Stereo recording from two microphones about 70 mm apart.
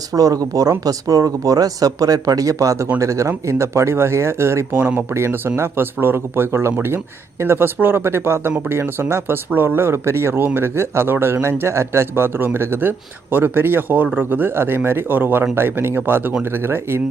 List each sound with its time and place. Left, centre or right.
0.1 s speech: right
4.7 s speech: right